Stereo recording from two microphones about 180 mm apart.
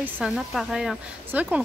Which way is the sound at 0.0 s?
Centre (ahead or behind).